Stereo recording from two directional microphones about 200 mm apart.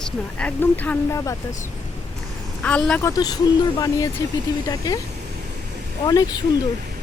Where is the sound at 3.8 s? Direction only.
15° left (ahead or behind).